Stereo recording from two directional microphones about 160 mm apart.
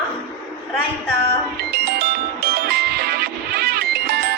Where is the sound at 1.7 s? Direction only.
85° right.